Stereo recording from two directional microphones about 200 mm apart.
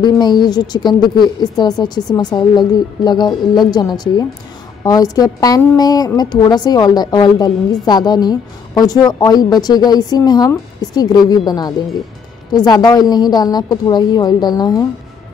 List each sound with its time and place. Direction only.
0.0 s a woman's voice: 20° left (ahead or behind)